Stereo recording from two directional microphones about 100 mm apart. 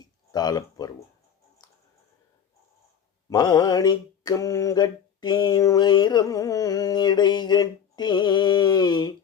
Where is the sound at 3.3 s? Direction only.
40° left (ahead or behind).